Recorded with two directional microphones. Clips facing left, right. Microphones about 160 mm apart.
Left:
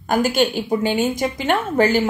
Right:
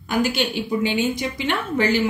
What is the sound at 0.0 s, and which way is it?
A woman's voice, 45° left (ahead or behind).